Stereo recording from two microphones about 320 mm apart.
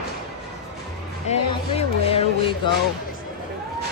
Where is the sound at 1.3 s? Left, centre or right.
Left.